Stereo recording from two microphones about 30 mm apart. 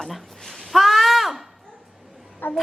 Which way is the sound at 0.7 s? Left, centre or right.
Centre.